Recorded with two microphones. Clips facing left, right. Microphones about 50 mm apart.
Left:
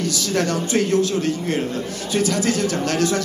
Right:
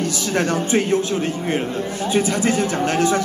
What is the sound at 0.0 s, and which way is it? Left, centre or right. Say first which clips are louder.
A man's voice: right 1 dB; right.